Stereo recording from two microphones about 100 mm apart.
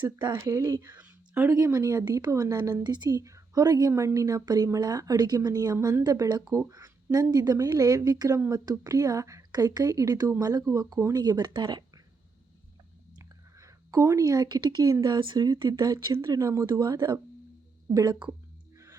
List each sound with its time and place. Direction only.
0.4 s speech: 35° right (ahead or behind)
0.9 s a sound: 20° right (ahead or behind)
1.5 s speech: 30° right (ahead or behind); by 11.9 s 50° right (ahead or behind)
13.1 s a sound: 35° right (ahead or behind)
15.0 s speech: 50° right (ahead or behind)
16.1 s speech: 30° right (ahead or behind); by 18.3 s 45° right (ahead or behind)